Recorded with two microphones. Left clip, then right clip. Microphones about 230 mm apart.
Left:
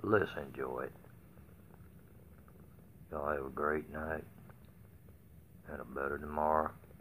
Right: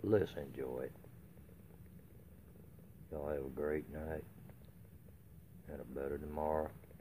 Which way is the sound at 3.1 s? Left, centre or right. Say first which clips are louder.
Left 4 dB; right.